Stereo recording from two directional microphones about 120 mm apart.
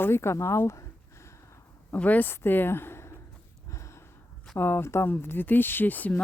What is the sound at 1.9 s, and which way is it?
Speech, 15° left (ahead or behind).